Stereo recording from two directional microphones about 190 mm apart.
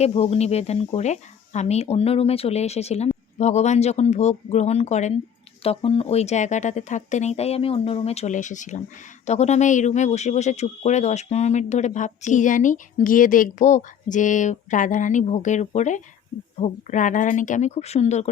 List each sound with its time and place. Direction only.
0.0 s speech: 30° left (ahead or behind)